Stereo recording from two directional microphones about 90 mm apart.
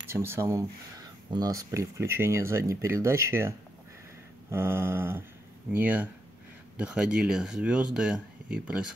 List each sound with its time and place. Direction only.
0.1 s speech: 25° right (ahead or behind)
4.5 s mantra: 25° right (ahead or behind)
6.8 s speech: 10° right (ahead or behind)